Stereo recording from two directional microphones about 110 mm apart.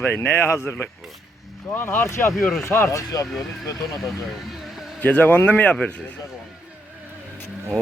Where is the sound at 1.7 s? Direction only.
20° left (ahead or behind).